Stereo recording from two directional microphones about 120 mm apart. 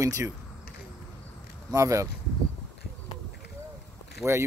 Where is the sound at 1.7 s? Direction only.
25° right (ahead or behind).